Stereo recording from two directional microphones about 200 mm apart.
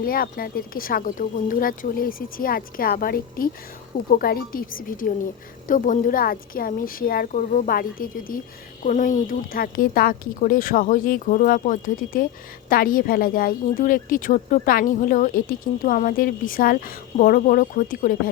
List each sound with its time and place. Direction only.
0.0 s speech: 45° left (ahead or behind)